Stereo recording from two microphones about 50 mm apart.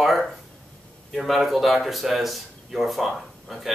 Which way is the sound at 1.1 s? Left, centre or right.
Centre.